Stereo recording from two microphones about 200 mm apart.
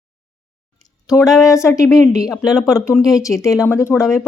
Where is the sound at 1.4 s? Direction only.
15° left (ahead or behind).